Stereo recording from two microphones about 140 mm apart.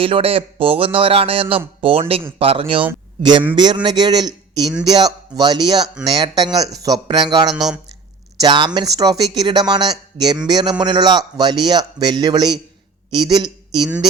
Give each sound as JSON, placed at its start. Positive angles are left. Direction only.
{"t": 0.0, "sound": "a man's voice", "side_deg": -40}
{"t": 7.5, "sound": "speech", "side_deg": -5}
{"t": 8.4, "sound": "a man's voice", "side_deg": -30}